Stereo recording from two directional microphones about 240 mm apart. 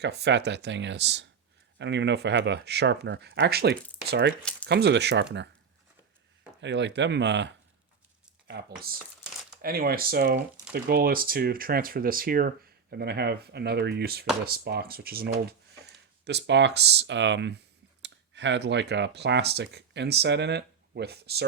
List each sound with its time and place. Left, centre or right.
0.0 s speech: right
6.6 s speech: right